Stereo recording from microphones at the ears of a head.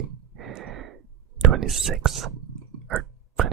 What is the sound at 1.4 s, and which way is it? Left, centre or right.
Speech, right.